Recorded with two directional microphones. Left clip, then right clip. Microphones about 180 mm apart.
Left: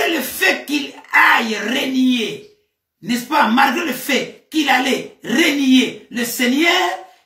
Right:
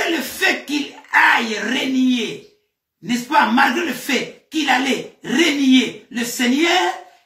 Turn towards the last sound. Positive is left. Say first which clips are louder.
# left 1 dB
turn(degrees=15)  # may be behind; listen again after turning